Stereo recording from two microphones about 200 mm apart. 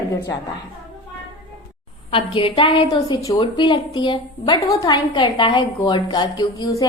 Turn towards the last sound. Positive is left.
turn(degrees=15)  # may be behind; listen again after turning